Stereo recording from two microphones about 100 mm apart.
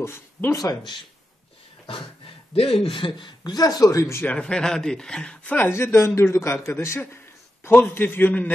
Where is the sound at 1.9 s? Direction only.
65° left (ahead or behind).